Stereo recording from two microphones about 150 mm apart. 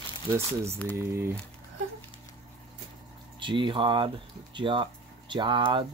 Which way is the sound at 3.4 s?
35° right (ahead or behind).